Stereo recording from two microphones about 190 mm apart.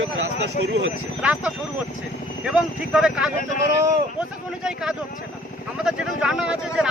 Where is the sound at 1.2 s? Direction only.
5° right (ahead or behind).